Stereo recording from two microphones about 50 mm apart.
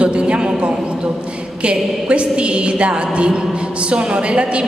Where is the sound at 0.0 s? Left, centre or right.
Right.